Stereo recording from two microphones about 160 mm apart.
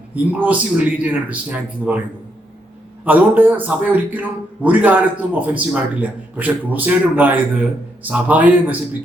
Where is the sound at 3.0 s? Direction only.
10° right (ahead or behind).